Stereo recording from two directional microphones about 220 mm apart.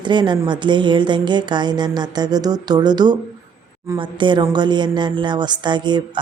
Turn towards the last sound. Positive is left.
turn(degrees=-20)  # may be behind; listen again after turning